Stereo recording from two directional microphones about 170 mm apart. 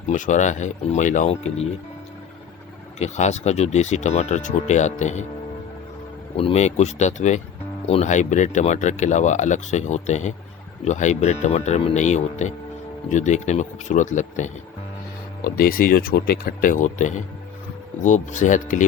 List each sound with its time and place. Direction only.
0.1 s speech: 45° left (ahead or behind)
3.0 s speech: 40° left (ahead or behind)
6.3 s speech: 35° left (ahead or behind)
15.4 s speech: 55° left (ahead or behind)